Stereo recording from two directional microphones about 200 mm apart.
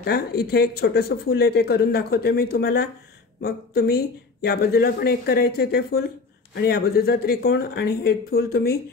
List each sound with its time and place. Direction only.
0.0 s speech: 55° left (ahead or behind)